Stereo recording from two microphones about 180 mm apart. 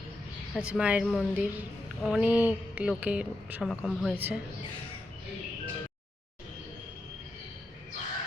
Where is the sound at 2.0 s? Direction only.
5° right (ahead or behind).